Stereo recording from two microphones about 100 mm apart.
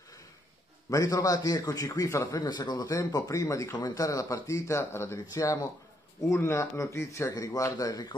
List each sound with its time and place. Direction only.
0.8 s a man's voice: 35° left (ahead or behind)